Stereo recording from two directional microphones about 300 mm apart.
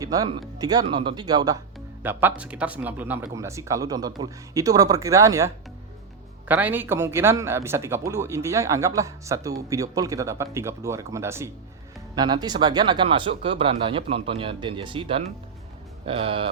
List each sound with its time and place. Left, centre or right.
0.0 s speech: centre
6.5 s speech: centre